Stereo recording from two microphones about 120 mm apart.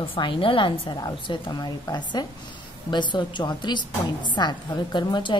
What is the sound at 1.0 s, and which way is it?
A woman's voice, 30° left (ahead or behind).